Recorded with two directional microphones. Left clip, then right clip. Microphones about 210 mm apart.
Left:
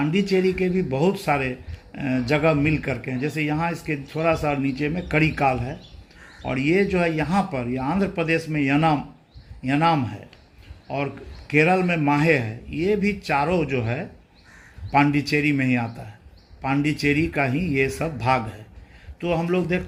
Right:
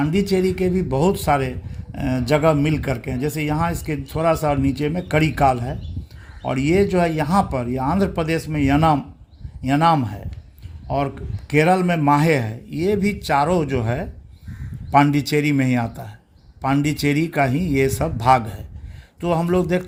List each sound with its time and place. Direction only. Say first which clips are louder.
0.0 s speech: right 1 dB; 55° right (ahead or behind)